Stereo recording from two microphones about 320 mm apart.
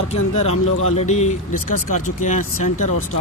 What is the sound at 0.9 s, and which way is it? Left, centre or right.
Speech, left.